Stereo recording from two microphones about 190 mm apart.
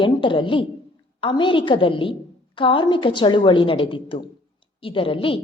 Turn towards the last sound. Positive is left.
turn(degrees=30)  # may be behind; listen again after turning